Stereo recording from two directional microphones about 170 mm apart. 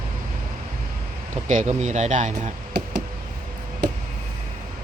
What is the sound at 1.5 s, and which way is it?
Speech, 45° right (ahead or behind).